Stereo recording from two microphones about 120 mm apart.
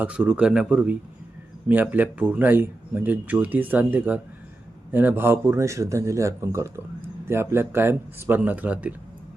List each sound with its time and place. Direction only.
0.0 s speech: 10° right (ahead or behind)